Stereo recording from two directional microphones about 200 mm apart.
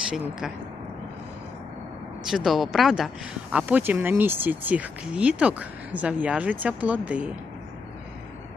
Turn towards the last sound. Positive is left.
turn(degrees=-5)  # may be behind; listen again after turning